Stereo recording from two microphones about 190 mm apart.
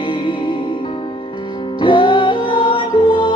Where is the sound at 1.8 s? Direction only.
25° left (ahead or behind).